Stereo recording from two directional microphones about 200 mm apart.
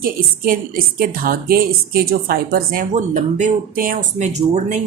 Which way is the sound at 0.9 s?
45° right (ahead or behind).